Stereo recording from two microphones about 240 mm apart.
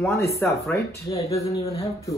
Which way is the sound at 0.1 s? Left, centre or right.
Centre.